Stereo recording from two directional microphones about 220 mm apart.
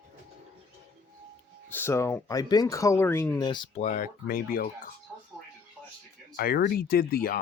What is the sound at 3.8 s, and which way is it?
Speech, 35° left (ahead or behind).